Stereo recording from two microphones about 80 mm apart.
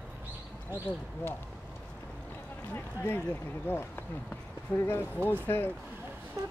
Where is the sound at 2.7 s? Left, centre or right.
Left.